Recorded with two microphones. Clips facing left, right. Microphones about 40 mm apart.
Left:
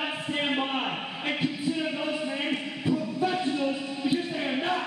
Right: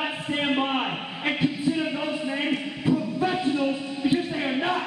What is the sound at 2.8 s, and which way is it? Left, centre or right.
Music, right.